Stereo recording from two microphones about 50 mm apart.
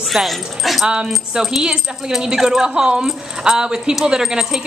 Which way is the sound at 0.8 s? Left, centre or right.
Centre.